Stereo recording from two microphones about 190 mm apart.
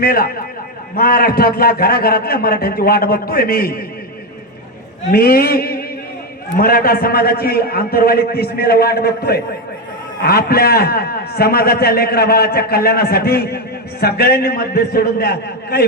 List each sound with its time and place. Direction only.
0.0 s a man's voice: 50° left (ahead or behind)
5.1 s a man's voice: 50° left (ahead or behind)